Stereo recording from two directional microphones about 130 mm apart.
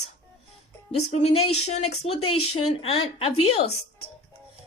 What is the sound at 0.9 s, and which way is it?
Speech, 50° left (ahead or behind).